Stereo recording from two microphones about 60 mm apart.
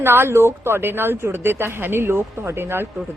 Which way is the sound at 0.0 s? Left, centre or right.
Right.